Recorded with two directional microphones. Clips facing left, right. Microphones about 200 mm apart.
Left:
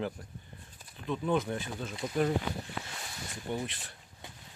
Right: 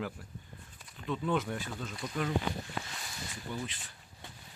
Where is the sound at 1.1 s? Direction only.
15° left (ahead or behind).